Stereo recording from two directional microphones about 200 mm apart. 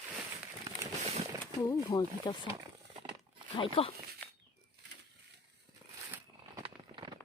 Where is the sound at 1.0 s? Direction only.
30° right (ahead or behind).